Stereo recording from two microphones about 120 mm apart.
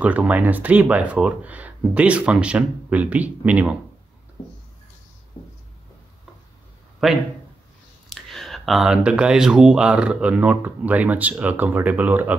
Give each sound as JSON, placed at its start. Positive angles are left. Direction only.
{"t": 0.0, "sound": "speech", "side_deg": -15}
{"t": 5.4, "sound": "writing", "side_deg": 35}
{"t": 7.0, "sound": "a man's voice", "side_deg": 0}